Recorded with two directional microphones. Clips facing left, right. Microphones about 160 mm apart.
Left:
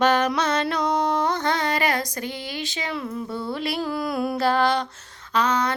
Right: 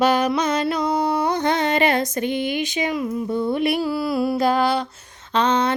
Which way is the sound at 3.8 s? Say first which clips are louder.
Right 4 dB; 5° right (ahead or behind).